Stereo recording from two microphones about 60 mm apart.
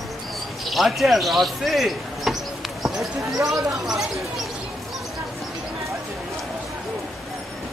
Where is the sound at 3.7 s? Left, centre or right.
Centre.